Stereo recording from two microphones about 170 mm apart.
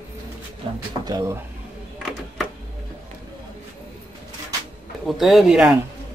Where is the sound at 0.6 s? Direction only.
30° right (ahead or behind).